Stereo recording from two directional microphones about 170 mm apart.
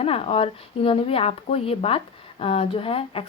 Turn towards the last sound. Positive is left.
turn(degrees=35)  # may be behind; listen again after turning